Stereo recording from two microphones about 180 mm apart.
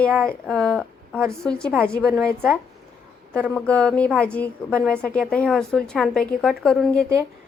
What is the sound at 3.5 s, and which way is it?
A woman's voice, 5° left (ahead or behind).